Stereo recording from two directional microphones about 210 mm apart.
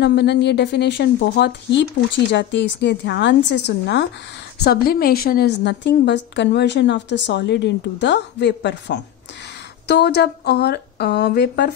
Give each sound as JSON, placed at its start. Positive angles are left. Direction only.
{"t": 0.0, "sound": "a woman's voice", "side_deg": 55}